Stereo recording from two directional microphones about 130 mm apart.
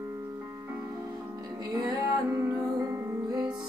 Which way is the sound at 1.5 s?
30° right (ahead or behind).